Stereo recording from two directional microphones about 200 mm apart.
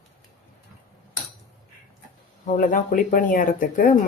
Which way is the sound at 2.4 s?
40° left (ahead or behind).